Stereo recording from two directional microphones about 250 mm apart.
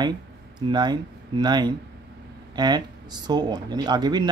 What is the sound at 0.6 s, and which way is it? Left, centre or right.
Speech, centre.